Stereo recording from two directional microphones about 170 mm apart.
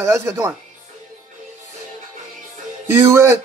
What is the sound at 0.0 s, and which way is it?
Speech, 15° right (ahead or behind).